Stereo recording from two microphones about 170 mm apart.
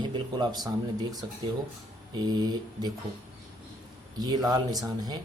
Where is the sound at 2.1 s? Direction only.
25° right (ahead or behind).